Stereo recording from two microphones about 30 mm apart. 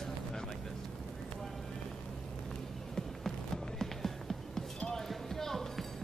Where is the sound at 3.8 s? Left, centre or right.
Centre.